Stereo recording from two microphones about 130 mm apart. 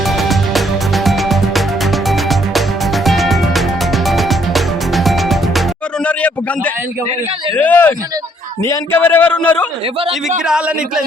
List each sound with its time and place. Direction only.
0.2 s music: centre (ahead or behind)
7.5 s a man's voice: 10° left (ahead or behind)
8.6 s a man's voice: 25° left (ahead or behind)
9.0 s a man's voice: 15° left (ahead or behind)
10.4 s a man's voice: 5° right (ahead or behind)